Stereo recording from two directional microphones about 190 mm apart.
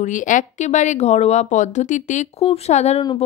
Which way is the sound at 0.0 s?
40° left (ahead or behind).